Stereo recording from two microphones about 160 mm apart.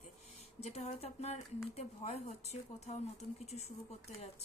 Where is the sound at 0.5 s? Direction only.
40° left (ahead or behind).